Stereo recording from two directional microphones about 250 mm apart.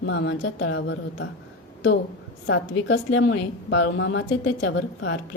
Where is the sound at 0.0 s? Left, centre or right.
Left.